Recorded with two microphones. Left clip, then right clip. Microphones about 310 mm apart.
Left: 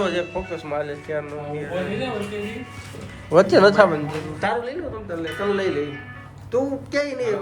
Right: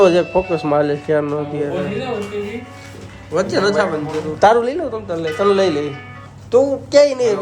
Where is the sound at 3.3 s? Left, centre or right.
Centre.